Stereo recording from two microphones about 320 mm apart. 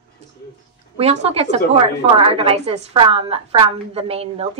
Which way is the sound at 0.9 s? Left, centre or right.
Centre.